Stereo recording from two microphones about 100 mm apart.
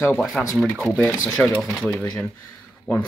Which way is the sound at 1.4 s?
10° left (ahead or behind).